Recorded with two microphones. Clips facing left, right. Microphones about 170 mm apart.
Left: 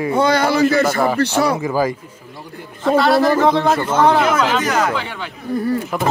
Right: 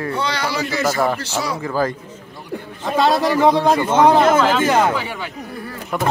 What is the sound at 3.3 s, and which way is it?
Speech, 15° right (ahead or behind).